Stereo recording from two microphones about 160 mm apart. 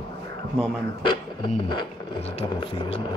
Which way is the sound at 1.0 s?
30° left (ahead or behind).